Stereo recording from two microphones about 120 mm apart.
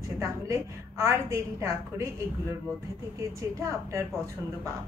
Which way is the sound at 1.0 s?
25° right (ahead or behind).